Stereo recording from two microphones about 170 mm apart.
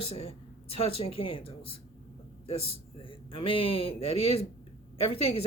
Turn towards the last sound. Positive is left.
turn(degrees=35)  # may be behind; listen again after turning